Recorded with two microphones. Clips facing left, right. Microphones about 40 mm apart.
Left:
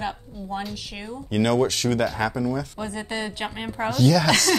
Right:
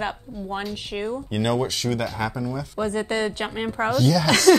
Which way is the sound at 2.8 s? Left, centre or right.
Right.